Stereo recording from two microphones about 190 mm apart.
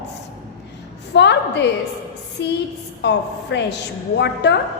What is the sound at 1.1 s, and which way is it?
A woman's voice, 65° left (ahead or behind).